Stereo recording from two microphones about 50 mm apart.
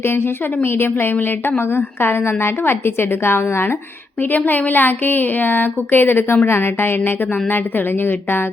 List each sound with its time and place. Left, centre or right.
0.0 s a woman's voice: left
4.2 s a woman's voice: left